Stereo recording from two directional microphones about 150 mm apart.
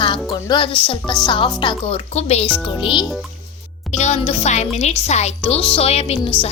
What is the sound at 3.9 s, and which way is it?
Speech, 50° left (ahead or behind).